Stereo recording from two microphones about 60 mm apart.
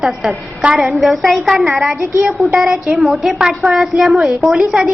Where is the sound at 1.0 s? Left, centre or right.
Centre.